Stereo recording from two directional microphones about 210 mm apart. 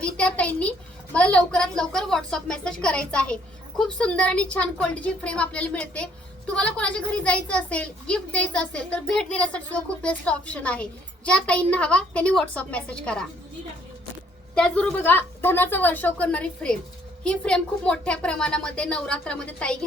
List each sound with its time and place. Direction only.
0.0 s a woman's voice: 5° left (ahead or behind)
14.5 s a woman's voice: 5° left (ahead or behind)